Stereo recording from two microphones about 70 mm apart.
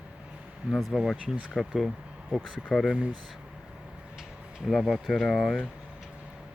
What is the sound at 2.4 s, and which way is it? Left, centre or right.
Speech, centre.